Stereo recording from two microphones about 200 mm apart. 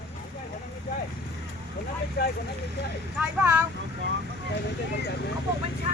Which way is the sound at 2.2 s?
55° left (ahead or behind).